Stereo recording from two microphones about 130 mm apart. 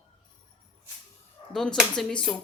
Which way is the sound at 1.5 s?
5° left (ahead or behind).